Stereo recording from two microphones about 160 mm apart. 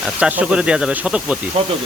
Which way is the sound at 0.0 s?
10° right (ahead or behind).